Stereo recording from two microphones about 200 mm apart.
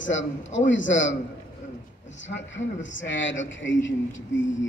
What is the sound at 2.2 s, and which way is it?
Speech, 65° left (ahead or behind).